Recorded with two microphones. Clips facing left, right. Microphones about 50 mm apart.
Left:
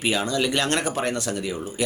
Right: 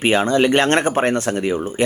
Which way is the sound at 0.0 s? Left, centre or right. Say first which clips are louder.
Right 8 dB; right.